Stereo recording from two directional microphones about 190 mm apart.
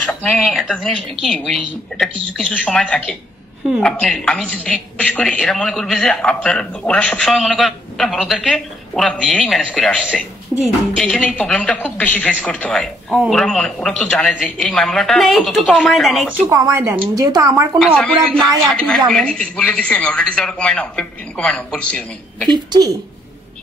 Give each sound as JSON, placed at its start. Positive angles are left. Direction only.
{"t": 0.0, "sound": "a woman's voice", "side_deg": 5}
{"t": 11.2, "sound": "a woman's voice", "side_deg": 5}
{"t": 16.3, "sound": "speech", "side_deg": -15}
{"t": 17.7, "sound": "a woman's voice", "side_deg": 0}
{"t": 22.5, "sound": "a woman's voice", "side_deg": -20}